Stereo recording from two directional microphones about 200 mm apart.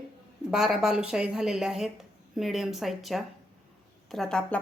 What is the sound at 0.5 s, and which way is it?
Speech, centre (ahead or behind).